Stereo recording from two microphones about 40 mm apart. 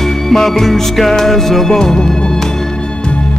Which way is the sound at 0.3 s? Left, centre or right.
Centre.